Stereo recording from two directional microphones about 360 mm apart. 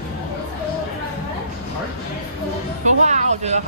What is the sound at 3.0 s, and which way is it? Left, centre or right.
Music, centre.